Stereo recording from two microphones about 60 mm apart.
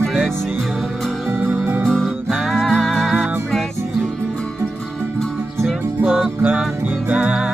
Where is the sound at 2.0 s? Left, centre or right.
Centre.